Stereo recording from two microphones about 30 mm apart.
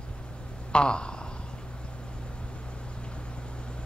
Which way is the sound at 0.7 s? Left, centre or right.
Left.